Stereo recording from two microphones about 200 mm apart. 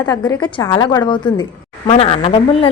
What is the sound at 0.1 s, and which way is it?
A woman's voice, 15° left (ahead or behind).